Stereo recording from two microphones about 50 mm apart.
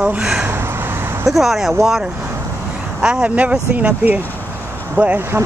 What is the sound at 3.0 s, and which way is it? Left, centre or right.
Speech, centre.